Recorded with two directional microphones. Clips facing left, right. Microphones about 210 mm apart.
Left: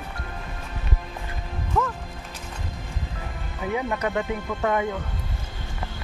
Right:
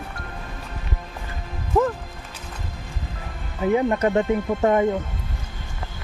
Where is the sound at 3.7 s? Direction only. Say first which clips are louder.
Right 6 dB; 35° right (ahead or behind).